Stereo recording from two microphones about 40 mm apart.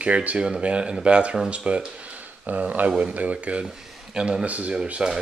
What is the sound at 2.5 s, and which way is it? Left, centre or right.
Speech, right.